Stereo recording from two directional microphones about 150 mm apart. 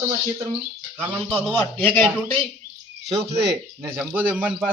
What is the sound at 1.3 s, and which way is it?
Speech, 10° left (ahead or behind).